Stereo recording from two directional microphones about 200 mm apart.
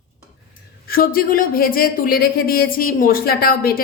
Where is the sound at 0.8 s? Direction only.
45° left (ahead or behind).